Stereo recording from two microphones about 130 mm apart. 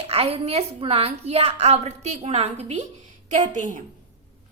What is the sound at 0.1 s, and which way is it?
A woman's voice, 50° right (ahead or behind).